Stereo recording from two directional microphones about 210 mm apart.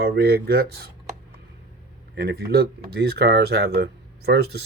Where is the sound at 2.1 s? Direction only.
50° right (ahead or behind).